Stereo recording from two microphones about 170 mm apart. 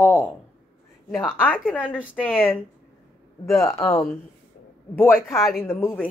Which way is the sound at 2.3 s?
10° left (ahead or behind).